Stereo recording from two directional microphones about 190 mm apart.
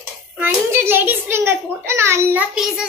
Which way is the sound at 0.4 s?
10° right (ahead or behind).